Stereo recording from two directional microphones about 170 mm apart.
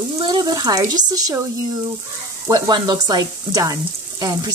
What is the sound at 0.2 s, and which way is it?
Speech, 25° right (ahead or behind).